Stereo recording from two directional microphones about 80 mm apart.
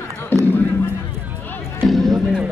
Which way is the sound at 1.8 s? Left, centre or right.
Centre.